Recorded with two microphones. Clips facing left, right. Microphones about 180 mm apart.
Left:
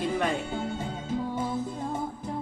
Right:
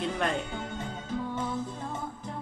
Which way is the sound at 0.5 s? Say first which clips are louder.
Left 4 dB; 30° left (ahead or behind).